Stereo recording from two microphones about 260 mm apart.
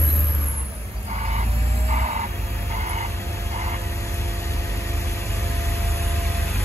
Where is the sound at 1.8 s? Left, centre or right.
Right.